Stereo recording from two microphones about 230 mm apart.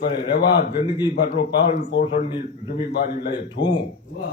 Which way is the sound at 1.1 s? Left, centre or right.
Left.